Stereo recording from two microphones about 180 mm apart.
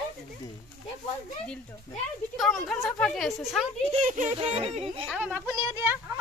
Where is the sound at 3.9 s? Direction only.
45° right (ahead or behind).